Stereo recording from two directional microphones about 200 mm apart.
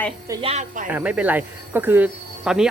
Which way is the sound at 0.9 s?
5° right (ahead or behind).